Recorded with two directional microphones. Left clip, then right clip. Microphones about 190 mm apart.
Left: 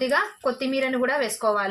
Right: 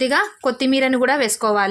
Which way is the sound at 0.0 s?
55° right (ahead or behind).